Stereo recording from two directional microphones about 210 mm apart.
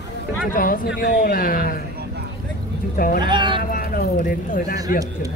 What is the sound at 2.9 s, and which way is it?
Speech, 45° left (ahead or behind).